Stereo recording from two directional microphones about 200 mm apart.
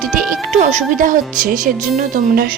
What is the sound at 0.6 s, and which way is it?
A woman's voice, 35° right (ahead or behind).